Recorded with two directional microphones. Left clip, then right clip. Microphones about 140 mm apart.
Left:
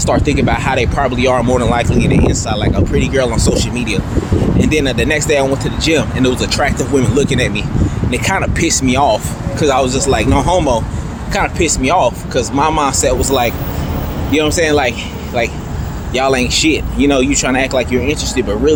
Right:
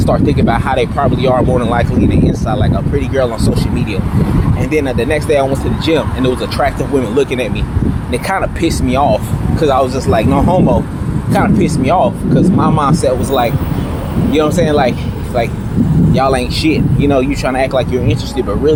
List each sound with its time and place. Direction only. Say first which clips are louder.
0.0 s speech: right 1 dB; 15° left (ahead or behind)
16.1 s speech: left 2 dB; 15° left (ahead or behind)